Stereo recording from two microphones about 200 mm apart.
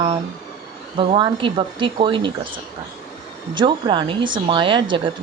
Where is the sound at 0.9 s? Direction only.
25° right (ahead or behind).